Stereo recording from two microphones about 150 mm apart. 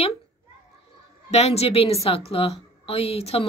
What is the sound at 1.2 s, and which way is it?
A woman's voice, 45° left (ahead or behind).